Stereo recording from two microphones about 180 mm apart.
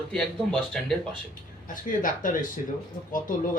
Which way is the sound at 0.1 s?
5° left (ahead or behind).